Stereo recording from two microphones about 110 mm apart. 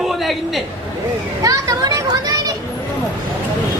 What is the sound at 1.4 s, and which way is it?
A child's voice, 35° right (ahead or behind).